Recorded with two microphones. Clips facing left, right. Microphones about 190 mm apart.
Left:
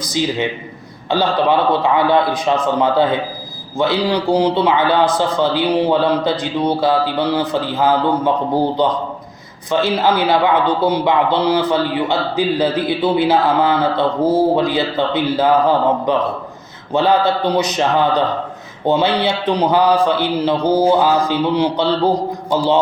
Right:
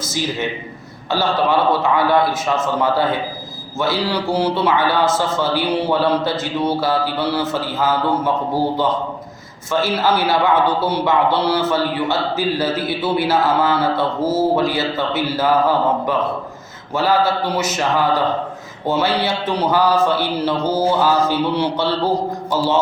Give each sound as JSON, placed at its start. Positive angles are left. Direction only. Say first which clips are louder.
{"t": 1.1, "sound": "a man's voice", "louder": "left 2 dB", "side_deg": 15}